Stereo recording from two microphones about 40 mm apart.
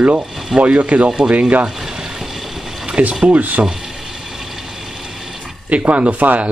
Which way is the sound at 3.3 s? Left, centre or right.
Right.